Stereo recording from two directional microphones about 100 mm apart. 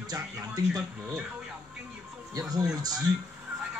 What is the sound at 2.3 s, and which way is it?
Speech, 40° right (ahead or behind).